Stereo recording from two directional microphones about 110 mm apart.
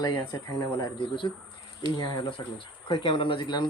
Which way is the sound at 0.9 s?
50° left (ahead or behind).